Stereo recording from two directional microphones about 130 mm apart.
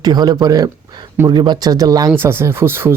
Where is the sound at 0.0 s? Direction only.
30° right (ahead or behind).